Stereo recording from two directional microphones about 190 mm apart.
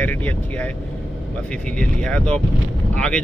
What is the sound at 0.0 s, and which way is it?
Speech, 10° left (ahead or behind).